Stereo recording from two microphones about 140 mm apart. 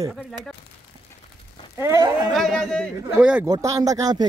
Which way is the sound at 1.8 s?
20° right (ahead or behind).